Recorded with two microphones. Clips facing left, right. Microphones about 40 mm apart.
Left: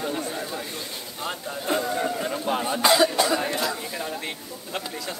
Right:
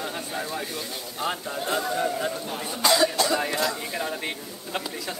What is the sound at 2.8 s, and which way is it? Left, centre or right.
Speech, centre.